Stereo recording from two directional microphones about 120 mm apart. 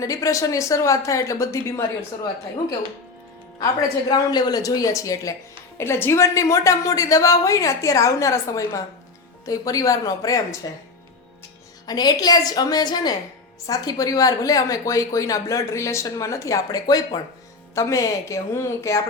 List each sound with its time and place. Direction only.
0.0 s a woman's voice: 25° left (ahead or behind)
4.3 s a woman's voice: 35° left (ahead or behind)
11.9 s a woman's voice: 35° left (ahead or behind)